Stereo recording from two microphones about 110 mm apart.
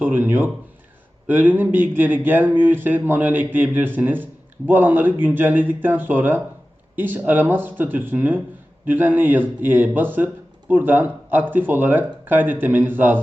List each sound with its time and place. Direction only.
0.0 s speech: 15° right (ahead or behind)